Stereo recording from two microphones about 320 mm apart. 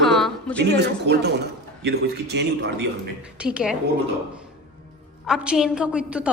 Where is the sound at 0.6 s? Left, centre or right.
Right.